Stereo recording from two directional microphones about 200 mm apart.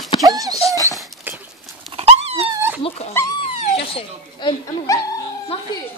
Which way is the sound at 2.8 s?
30° left (ahead or behind).